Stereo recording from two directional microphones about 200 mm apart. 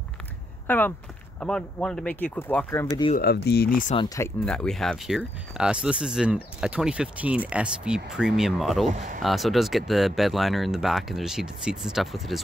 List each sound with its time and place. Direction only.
0.7 s speech: 10° left (ahead or behind)
3.2 s speech: 55° left (ahead or behind)
3.9 s speech: 20° left (ahead or behind)
4.5 s speech: 5° left (ahead or behind)
8.8 s speech: 40° right (ahead or behind)
9.2 s speech: centre (ahead or behind)